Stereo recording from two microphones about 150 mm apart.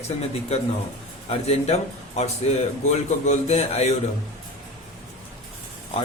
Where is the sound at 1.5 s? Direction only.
45° left (ahead or behind).